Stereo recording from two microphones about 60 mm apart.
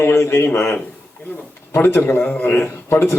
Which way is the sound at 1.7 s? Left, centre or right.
Left.